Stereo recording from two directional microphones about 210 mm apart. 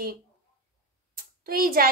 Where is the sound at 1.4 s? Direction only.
45° right (ahead or behind).